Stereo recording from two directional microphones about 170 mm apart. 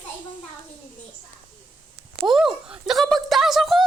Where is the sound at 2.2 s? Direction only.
Centre (ahead or behind).